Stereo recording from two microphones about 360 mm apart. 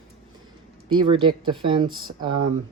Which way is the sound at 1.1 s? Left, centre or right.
Centre.